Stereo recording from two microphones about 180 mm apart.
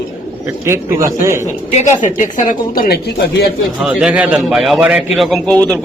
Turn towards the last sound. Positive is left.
turn(degrees=5)  # may be behind; listen again after turning